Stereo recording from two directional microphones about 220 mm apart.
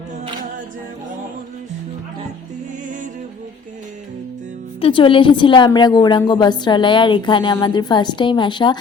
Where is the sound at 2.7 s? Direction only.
35° right (ahead or behind).